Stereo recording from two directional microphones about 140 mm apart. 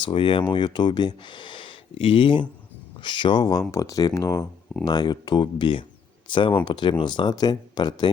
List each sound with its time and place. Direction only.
0.0 s speech: 40° left (ahead or behind)